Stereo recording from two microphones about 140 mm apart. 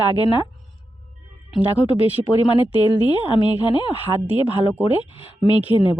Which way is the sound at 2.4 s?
40° left (ahead or behind).